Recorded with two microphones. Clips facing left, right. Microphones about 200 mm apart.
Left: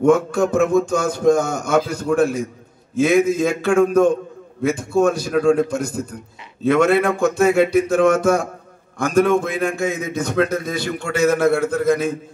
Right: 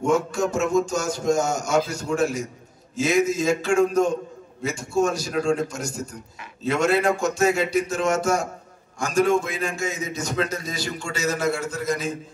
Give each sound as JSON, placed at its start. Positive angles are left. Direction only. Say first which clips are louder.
{"t": 0.0, "sound": "a man's voice", "louder": "left 6 dB", "side_deg": 55}